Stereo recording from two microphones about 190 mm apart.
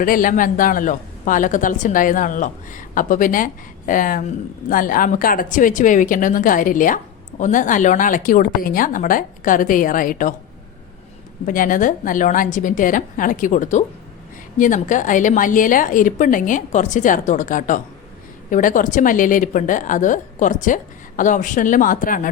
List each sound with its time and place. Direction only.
0.0 s speech: 45° left (ahead or behind)
11.4 s speech: 45° left (ahead or behind)